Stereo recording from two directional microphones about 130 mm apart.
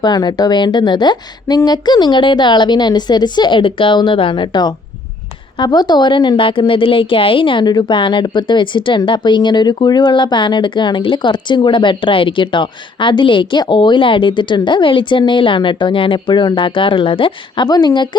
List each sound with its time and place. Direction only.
0.0 s a woman's voice: 35° left (ahead or behind)